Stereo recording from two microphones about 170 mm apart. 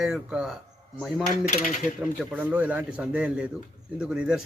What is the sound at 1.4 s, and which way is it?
Coin, 45° left (ahead or behind).